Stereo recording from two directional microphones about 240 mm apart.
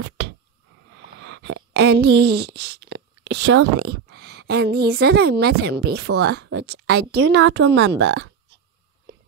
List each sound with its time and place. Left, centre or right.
1.2 s speech: right